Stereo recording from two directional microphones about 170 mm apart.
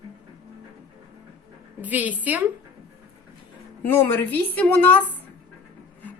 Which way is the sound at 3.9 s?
15° left (ahead or behind).